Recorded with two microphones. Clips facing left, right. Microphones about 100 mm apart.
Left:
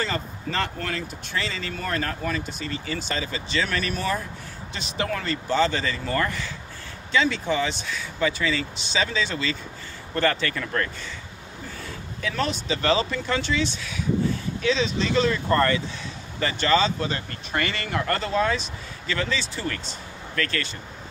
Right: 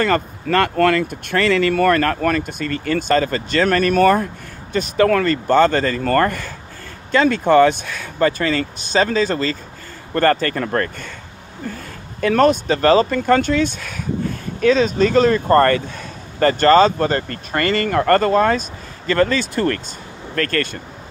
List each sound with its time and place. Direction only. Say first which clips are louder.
0.0 s speech: right 10 dB; 60° right (ahead or behind)
12.2 s speech: right 13 dB; 55° right (ahead or behind)